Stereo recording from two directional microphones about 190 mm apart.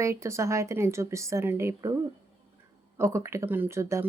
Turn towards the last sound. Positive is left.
turn(degrees=-15)  # may be behind; listen again after turning